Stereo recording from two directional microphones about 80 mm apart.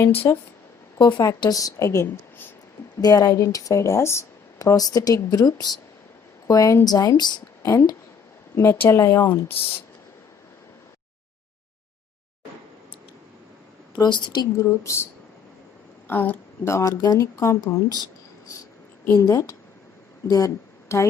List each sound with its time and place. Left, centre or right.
0.0 s speech: left
3.0 s speech: left
4.5 s speech: left
6.5 s speech: left
7.6 s speech: left
13.9 s a woman's voice: left
14.6 s speech: left
16.0 s speech: left
16.6 s speech: left
19.1 s speech: left
20.8 s a sound: left